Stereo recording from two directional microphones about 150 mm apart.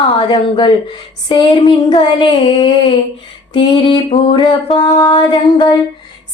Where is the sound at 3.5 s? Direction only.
30° left (ahead or behind).